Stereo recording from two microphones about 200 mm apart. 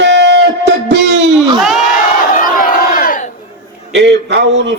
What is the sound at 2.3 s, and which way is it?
Crowd, 45° left (ahead or behind).